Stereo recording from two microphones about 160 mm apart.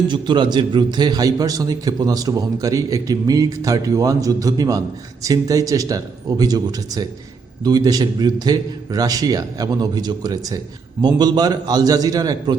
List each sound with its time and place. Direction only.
0.1 s a man's voice: 30° right (ahead or behind)